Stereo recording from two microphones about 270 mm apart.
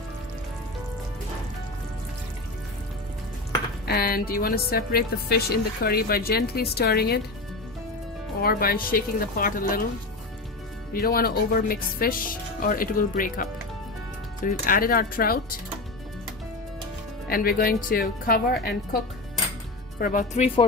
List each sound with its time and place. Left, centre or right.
3.8 s a woman's voice: left
8.4 s a woman's voice: left
10.9 s a woman's voice: left
17.3 s a woman's voice: left
20.0 s speech: left